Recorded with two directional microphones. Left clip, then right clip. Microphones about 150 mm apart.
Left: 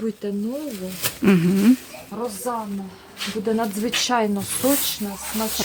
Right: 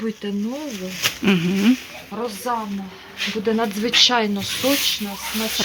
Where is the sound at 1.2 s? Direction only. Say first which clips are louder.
Left 4 dB; 25° left (ahead or behind).